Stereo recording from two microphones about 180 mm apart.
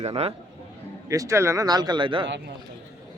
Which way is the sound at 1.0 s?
20° right (ahead or behind).